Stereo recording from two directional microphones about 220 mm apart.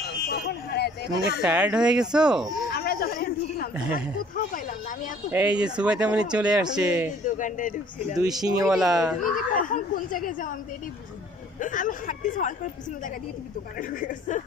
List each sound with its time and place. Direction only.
0.3 s a sound: 50° left (ahead or behind)
1.4 s speech: 5° right (ahead or behind)
2.7 s a sound: 45° left (ahead or behind)
5.3 s speech: 5° right (ahead or behind)
7.2 s speech: 35° left (ahead or behind)
8.2 s speech: 15° right (ahead or behind)
8.6 s speech: centre (ahead or behind)
9.2 s speech: 35° left (ahead or behind)
11.6 s speech: 35° left (ahead or behind)
13.7 s speech: 35° left (ahead or behind)